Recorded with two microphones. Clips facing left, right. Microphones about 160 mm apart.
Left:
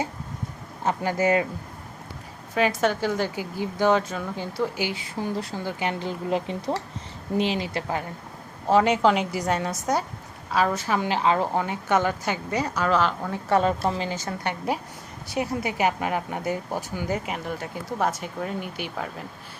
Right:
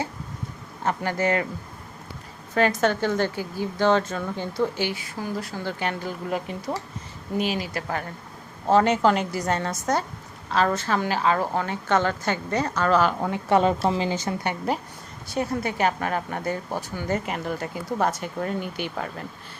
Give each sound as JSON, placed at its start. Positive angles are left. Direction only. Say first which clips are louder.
{"t": 0.9, "sound": "speech", "louder": "left 1 dB", "side_deg": 15}
{"t": 2.6, "sound": "speech", "louder": "right 1 dB", "side_deg": 5}
{"t": 8.7, "sound": "speech", "louder": "even", "side_deg": 5}
{"t": 13.3, "sound": "speech", "louder": "right 1 dB", "side_deg": -25}
{"t": 15.3, "sound": "speech", "louder": "right 1 dB", "side_deg": 15}